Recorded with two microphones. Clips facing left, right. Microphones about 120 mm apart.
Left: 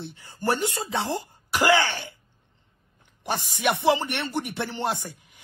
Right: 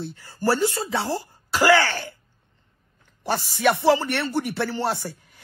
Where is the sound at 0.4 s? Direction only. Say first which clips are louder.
Right 4 dB; 20° left (ahead or behind).